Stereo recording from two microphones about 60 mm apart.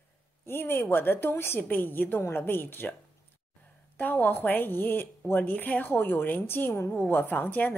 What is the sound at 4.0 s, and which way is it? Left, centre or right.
A woman's voice, left.